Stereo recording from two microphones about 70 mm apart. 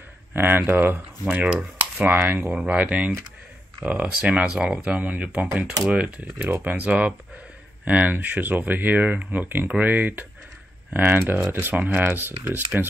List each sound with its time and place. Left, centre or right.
0.3 s speech: right
1.2 s rub: centre
2.0 s speech: right
2.5 s speech: centre